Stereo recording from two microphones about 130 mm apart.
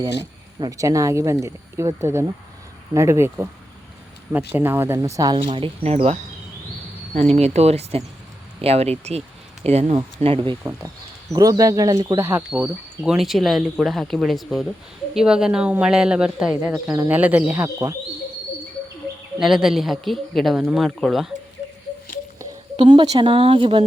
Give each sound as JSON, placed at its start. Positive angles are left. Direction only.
{"t": 0.6, "sound": "speech", "side_deg": -25}
{"t": 5.5, "sound": "a woman's voice", "side_deg": -40}
{"t": 11.3, "sound": "speech", "side_deg": -25}
{"t": 12.2, "sound": "speech", "side_deg": -15}
{"t": 19.4, "sound": "speech", "side_deg": -5}
{"t": 22.8, "sound": "a woman's voice", "side_deg": -40}